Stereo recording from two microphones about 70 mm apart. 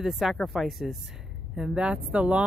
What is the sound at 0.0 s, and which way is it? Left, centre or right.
A woman's voice, centre.